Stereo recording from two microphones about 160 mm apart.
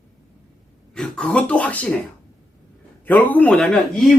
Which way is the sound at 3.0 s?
10° left (ahead or behind).